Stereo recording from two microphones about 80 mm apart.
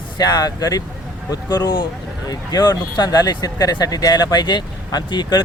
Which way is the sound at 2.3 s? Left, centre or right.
Left.